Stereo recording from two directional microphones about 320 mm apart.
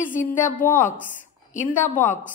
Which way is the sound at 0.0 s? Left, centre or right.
Left.